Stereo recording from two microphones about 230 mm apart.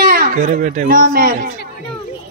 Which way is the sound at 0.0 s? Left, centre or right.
Right.